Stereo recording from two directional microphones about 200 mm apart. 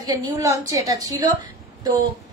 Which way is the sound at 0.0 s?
15° right (ahead or behind).